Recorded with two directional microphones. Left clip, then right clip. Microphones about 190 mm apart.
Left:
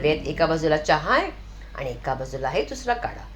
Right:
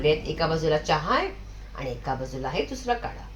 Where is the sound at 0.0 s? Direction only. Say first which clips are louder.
Left 2 dB; 20° left (ahead or behind).